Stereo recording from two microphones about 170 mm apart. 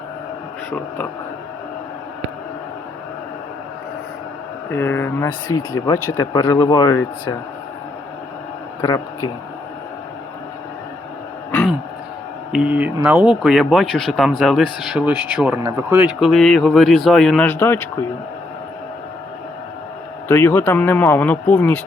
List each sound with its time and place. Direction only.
4.7 s speech: 10° left (ahead or behind)
8.8 s a man's voice: 20° left (ahead or behind)
12.5 s speech: 5° right (ahead or behind)
16.2 s speech: centre (ahead or behind)
20.2 s speech: 15° left (ahead or behind)